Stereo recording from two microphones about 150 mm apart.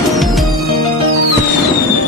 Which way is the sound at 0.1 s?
Centre (ahead or behind).